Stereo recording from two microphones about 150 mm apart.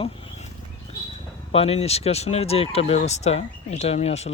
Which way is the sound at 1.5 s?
45° left (ahead or behind).